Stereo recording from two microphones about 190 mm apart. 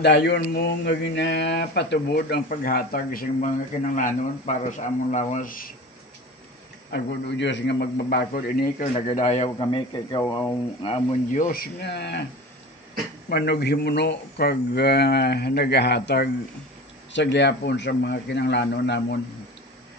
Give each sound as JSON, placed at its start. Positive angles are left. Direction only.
{"t": 0.0, "sound": "speech", "side_deg": 60}
{"t": 6.9, "sound": "speech", "side_deg": 70}
{"t": 9.0, "sound": "a man's voice", "side_deg": 35}
{"t": 9.6, "sound": "speech", "side_deg": 25}
{"t": 10.8, "sound": "speech", "side_deg": 30}
{"t": 11.3, "sound": "speech", "side_deg": 45}
{"t": 13.3, "sound": "speech", "side_deg": 60}